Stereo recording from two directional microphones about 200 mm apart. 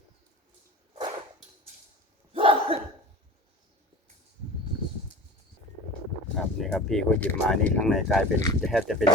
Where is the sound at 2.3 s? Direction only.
30° right (ahead or behind).